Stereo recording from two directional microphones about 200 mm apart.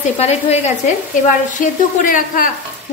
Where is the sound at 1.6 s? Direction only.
45° left (ahead or behind).